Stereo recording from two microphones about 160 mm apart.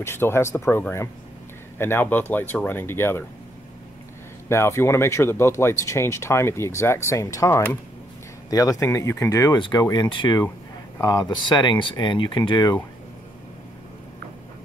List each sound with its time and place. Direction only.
0.0 s speech: 15° left (ahead or behind)
4.5 s speech: 15° left (ahead or behind)